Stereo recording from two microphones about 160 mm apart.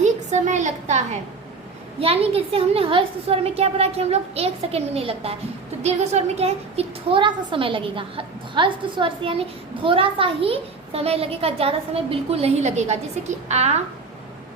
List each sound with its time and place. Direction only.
0.0 s a woman's voice: 45° right (ahead or behind)
2.0 s a woman's voice: 40° right (ahead or behind)